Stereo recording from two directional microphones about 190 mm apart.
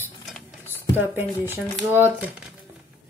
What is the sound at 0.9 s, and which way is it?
Speech, 10° right (ahead or behind).